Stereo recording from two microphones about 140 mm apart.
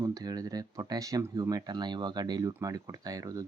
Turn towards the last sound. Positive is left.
turn(degrees=-25)  # may be behind; listen again after turning